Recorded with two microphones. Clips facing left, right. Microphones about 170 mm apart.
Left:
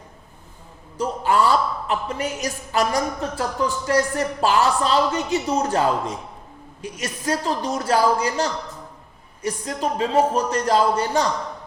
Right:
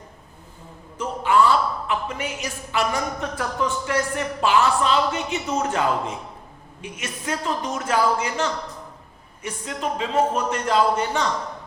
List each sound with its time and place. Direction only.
0.9 s a woman's voice: 40° left (ahead or behind)